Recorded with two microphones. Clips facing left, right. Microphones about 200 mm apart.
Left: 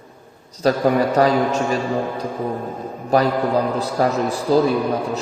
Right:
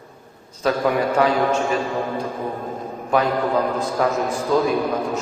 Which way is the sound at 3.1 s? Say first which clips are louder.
Left 2 dB; 35° left (ahead or behind).